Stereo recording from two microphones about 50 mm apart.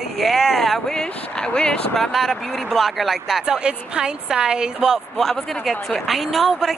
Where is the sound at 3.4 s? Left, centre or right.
Centre.